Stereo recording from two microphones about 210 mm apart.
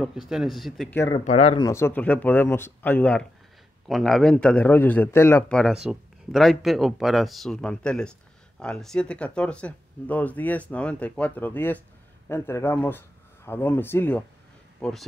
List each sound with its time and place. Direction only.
0.0 s a man's voice: centre (ahead or behind)
1.2 s speech: 30° left (ahead or behind)
1.6 s a man's voice: 15° left (ahead or behind)